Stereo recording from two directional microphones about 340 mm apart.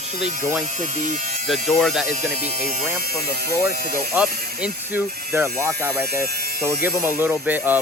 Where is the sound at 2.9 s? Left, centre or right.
Right.